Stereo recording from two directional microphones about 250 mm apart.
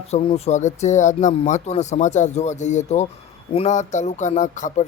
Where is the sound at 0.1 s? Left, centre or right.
Left.